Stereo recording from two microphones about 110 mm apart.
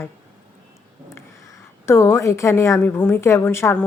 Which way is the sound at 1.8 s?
25° left (ahead or behind).